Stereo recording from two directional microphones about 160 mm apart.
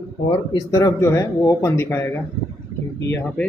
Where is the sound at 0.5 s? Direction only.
25° left (ahead or behind).